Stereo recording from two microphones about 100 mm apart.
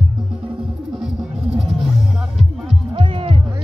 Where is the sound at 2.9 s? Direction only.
65° right (ahead or behind).